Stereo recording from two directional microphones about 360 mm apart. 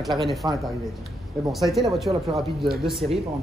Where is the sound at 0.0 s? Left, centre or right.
Centre.